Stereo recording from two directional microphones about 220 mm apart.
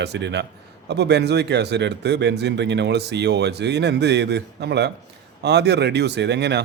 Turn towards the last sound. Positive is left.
turn(degrees=-50)  # may be behind; listen again after turning